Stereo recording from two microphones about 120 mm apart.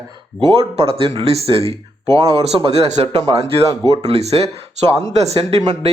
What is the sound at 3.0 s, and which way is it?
A man's voice, 60° right (ahead or behind).